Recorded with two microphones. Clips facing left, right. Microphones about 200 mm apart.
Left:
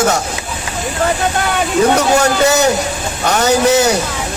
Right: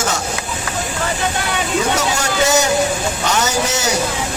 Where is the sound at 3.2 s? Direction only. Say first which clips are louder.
Left 9 dB; 55° left (ahead or behind).